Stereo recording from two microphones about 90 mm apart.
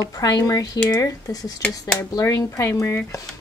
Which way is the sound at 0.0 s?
45° left (ahead or behind).